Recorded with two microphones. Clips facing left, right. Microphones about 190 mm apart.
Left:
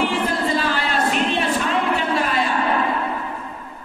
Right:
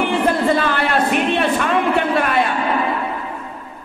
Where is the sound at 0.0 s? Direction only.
60° right (ahead or behind).